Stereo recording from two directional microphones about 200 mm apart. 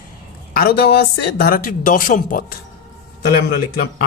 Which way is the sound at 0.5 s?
50° left (ahead or behind).